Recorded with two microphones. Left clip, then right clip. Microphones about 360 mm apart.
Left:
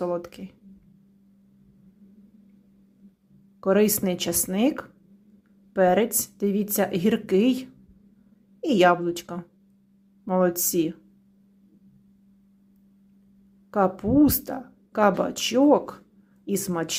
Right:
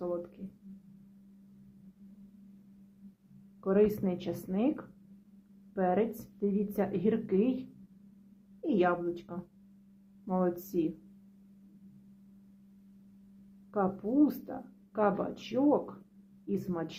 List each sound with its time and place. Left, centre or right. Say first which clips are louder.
0.0 s a sound: left 8 dB; left
3.6 s a woman's voice: left 6 dB; centre
8.6 s a woman's voice: left 10 dB; centre
13.7 s a woman's voice: left 9 dB; centre